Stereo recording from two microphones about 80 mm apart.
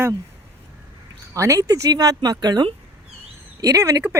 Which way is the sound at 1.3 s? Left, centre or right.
Right.